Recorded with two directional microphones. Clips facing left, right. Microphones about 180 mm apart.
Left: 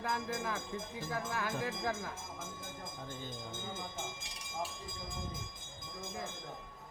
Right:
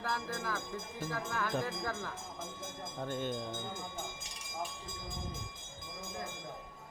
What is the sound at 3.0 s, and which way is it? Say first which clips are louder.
Speech: right 11 dB; 70° right (ahead or behind).